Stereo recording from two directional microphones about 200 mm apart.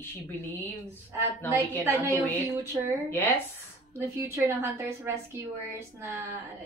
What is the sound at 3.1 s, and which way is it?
Speech, 10° left (ahead or behind).